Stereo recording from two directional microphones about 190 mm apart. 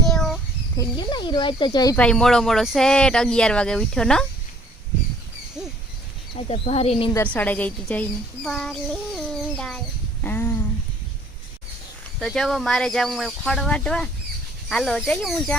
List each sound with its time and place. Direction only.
0.0 s a sound: centre (ahead or behind)
0.8 s speech: 25° left (ahead or behind)
2.0 s speech: 5° left (ahead or behind)
6.5 s speech: 30° left (ahead or behind)
7.3 s a woman's voice: 10° left (ahead or behind)
10.2 s a sound: 10° left (ahead or behind)
12.2 s speech: centre (ahead or behind)